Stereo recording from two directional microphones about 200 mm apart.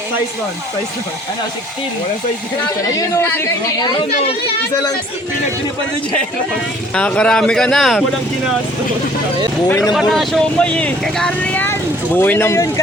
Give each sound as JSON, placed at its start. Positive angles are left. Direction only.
{"t": 3.2, "sound": "speech", "side_deg": 10}
{"t": 6.9, "sound": "speech", "side_deg": 5}
{"t": 9.6, "sound": "speech", "side_deg": 15}
{"t": 9.9, "sound": "speech", "side_deg": 0}